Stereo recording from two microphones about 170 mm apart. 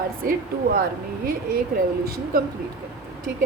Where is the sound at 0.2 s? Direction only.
55° right (ahead or behind).